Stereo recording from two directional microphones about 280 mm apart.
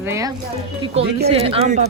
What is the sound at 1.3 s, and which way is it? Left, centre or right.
Speech, right.